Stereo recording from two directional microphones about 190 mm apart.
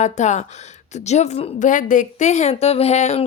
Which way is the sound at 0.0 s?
40° left (ahead or behind).